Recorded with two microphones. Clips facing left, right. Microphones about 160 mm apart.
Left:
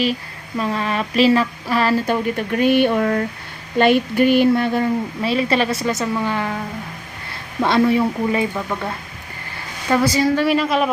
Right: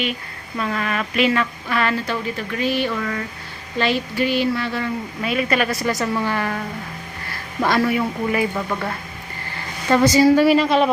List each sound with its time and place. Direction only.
0.6 s speech: 30° left (ahead or behind)
2.0 s speech: 50° left (ahead or behind)
5.2 s speech: 30° left (ahead or behind)
7.6 s speech: 20° left (ahead or behind)
9.9 s a woman's voice: 5° left (ahead or behind)